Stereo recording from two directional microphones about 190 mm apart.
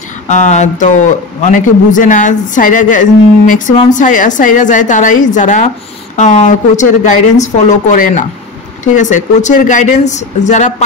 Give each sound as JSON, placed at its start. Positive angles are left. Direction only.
{"t": 0.3, "sound": "speech", "side_deg": 40}